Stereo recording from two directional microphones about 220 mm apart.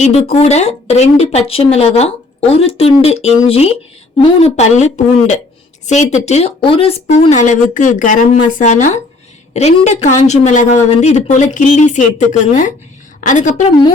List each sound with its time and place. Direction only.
0.3 s speech: 30° left (ahead or behind)